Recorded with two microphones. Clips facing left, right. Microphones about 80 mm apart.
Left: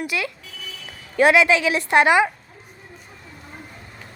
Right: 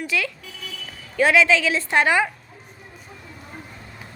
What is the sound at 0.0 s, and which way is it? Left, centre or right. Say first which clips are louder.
A woman's voice: even; centre.